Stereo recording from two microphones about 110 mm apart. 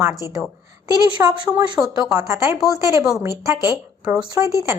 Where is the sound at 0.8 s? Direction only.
35° right (ahead or behind).